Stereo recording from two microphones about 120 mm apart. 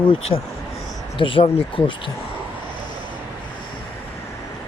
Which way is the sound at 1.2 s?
50° left (ahead or behind).